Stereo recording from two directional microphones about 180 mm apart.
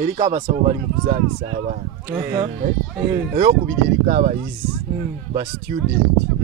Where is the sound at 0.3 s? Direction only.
45° right (ahead or behind).